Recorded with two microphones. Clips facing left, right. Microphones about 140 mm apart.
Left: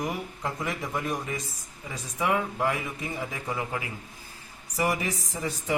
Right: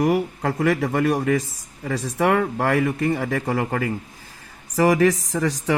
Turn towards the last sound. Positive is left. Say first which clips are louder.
# right 7 dB
turn(degrees=-90)